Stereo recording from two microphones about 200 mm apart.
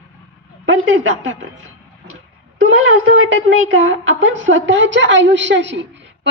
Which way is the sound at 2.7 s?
80° right.